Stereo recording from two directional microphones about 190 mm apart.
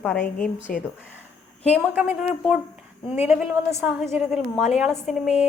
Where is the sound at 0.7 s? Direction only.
45° left (ahead or behind).